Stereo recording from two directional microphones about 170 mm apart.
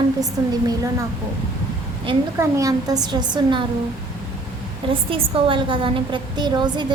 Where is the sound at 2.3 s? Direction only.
20° right (ahead or behind).